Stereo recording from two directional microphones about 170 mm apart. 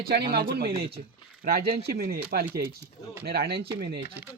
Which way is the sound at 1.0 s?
50° right (ahead or behind).